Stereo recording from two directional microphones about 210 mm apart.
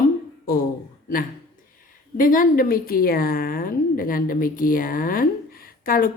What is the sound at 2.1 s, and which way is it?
A woman's voice, 40° left (ahead or behind).